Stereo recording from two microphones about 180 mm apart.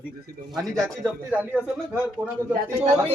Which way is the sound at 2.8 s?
35° right (ahead or behind).